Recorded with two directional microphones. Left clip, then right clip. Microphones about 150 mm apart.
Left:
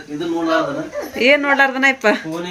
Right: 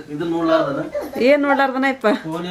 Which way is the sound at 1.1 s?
15° right (ahead or behind).